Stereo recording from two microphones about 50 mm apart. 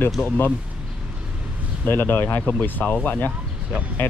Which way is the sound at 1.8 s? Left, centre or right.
Left.